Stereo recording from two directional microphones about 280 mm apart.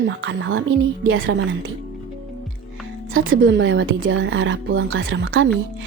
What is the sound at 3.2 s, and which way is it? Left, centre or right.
Speech, right.